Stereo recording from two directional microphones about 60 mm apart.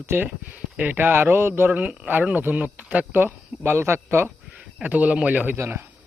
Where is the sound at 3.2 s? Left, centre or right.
Right.